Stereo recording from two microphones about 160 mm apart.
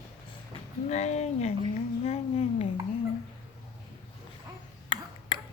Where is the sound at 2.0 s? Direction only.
40° left (ahead or behind).